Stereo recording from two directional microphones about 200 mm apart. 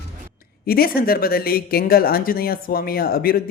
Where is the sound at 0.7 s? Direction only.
50° left (ahead or behind).